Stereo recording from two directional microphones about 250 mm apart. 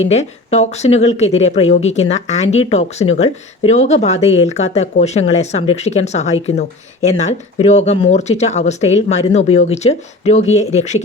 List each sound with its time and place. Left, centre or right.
0.1 s speech: left